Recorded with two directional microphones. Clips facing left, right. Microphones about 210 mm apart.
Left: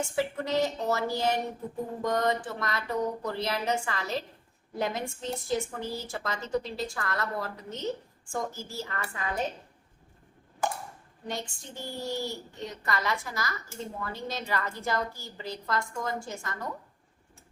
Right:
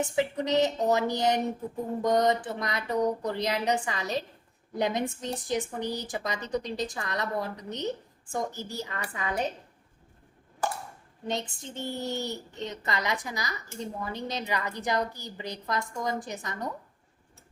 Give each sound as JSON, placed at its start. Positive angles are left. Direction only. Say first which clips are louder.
{"t": 0.0, "sound": "a woman's voice", "louder": "right 2 dB", "side_deg": -20}
{"t": 11.3, "sound": "a child's voice", "louder": "right 4 dB", "side_deg": -20}